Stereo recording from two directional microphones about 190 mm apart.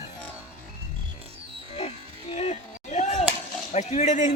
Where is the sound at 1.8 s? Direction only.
35° left (ahead or behind).